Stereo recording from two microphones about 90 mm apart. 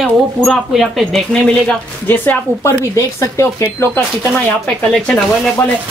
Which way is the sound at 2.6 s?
35° left (ahead or behind).